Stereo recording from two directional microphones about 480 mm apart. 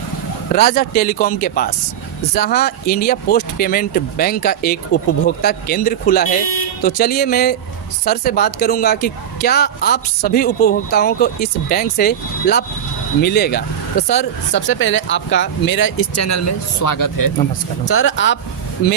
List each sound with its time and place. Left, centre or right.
0.5 s a man's voice: centre; by 17.3 s left
17.8 s a man's voice: left